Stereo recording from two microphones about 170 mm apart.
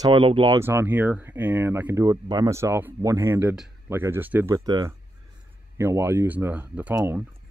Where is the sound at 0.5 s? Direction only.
15° right (ahead or behind).